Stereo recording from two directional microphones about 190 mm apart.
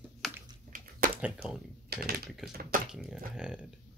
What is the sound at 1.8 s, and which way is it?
Speech, 55° right (ahead or behind).